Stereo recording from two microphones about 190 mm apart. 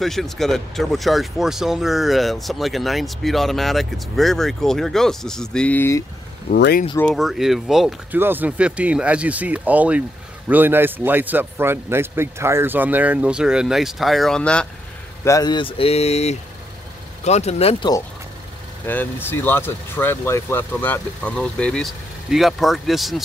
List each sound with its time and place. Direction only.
0.0 s speech: centre (ahead or behind)
6.5 s speech: 50° left (ahead or behind)
7.1 s speech: centre (ahead or behind)
15.2 s speech: 20° left (ahead or behind)
18.9 s speech: 10° left (ahead or behind)